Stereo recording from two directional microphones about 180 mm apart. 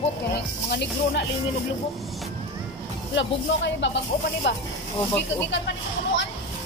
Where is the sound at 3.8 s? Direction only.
85° left.